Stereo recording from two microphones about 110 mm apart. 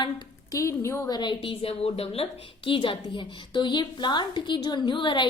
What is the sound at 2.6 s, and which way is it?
A woman's voice, 50° left (ahead or behind).